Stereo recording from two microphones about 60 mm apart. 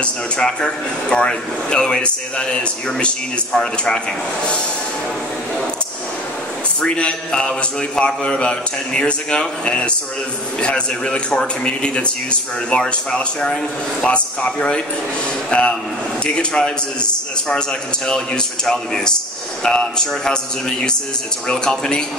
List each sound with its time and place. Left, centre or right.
0.0 s a man's voice: centre
6.8 s a man's voice: centre
21.5 s a man's voice: centre